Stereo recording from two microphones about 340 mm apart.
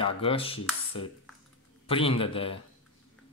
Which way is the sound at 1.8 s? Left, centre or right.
Centre.